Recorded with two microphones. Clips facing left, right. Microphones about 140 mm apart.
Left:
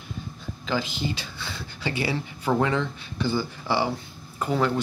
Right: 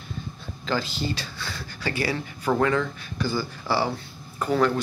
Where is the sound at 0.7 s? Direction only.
15° left (ahead or behind).